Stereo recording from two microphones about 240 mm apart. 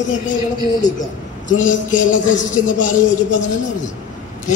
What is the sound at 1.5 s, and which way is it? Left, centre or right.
A man's voice, left.